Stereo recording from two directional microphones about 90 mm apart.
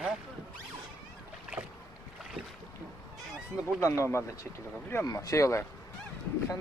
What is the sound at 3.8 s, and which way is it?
Speech, 35° left (ahead or behind).